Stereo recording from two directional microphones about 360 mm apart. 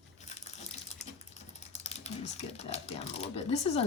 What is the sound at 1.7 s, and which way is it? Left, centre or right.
Typing, centre.